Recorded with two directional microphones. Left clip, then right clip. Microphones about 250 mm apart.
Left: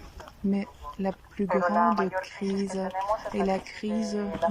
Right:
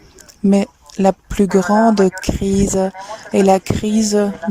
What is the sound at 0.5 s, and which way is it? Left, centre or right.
Speech, right.